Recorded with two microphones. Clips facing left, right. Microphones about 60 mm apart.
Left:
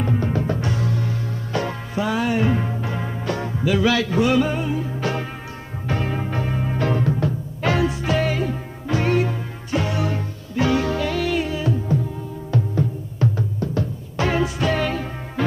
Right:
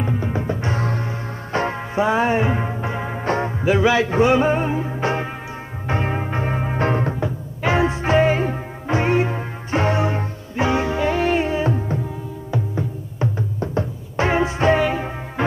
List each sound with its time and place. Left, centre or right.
0.0 s music: centre; by 7.2 s right
7.2 s music: centre
12.4 s music: centre